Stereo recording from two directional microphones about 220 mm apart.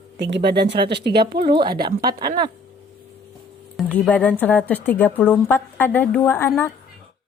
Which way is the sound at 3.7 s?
5° left (ahead or behind).